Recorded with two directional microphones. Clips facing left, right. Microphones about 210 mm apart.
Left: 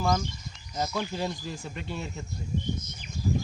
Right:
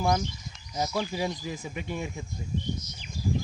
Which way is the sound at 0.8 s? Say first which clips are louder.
Right 1 dB; 10° right (ahead or behind).